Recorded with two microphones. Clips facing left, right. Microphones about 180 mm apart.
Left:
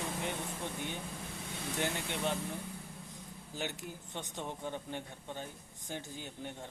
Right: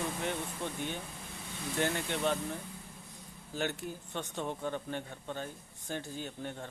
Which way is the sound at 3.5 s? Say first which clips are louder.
Right 5 dB; 15° left (ahead or behind).